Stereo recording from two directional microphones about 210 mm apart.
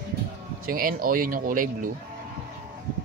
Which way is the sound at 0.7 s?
45° right (ahead or behind).